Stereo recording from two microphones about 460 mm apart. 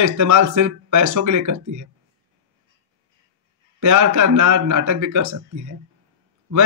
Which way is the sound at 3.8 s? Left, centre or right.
Right.